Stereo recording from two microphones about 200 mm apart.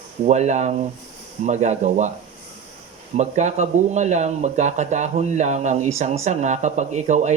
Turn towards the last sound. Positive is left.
turn(degrees=-35)  # may be behind; listen again after turning